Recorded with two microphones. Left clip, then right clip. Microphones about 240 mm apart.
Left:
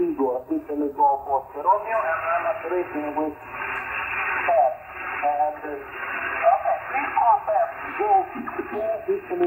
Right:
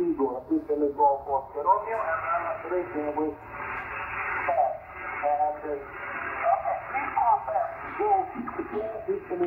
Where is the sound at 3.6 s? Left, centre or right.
Left.